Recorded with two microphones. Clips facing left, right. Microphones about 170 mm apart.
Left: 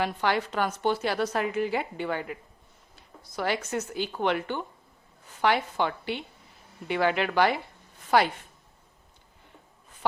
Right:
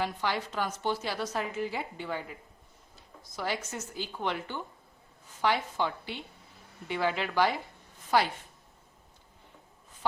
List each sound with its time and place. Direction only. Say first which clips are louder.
0.0 s a woman's voice: left 5 dB; 65° left (ahead or behind)